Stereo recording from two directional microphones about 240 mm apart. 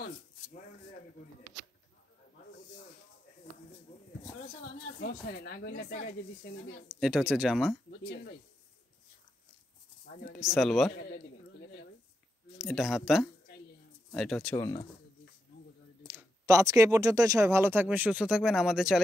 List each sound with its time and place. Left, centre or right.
5.0 s speech: left
6.9 s speech: centre
8.0 s speech: left
10.4 s speech: centre
12.5 s speech: centre
14.5 s speech: centre
16.0 s speech: centre